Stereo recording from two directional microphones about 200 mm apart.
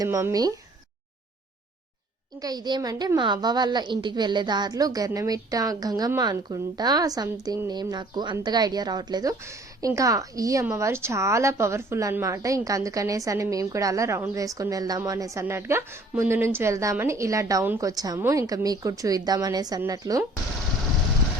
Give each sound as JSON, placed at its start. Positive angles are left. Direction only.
{"t": 0.0, "sound": "a woman's voice", "side_deg": -15}
{"t": 2.4, "sound": "a woman's voice", "side_deg": -20}